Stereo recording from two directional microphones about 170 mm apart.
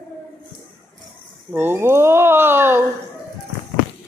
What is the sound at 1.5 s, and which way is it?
Speech, 10° right (ahead or behind).